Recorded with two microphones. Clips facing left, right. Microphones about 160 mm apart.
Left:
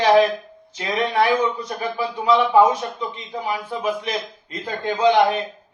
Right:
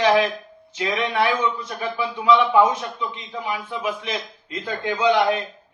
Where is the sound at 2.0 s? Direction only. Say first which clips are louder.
Even; 40° left (ahead or behind).